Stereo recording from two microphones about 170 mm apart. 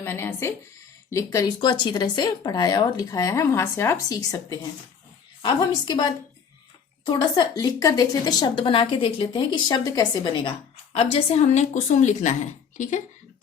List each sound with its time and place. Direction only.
0.0 s a woman's voice: 15° left (ahead or behind)
10.9 s speech: 35° left (ahead or behind)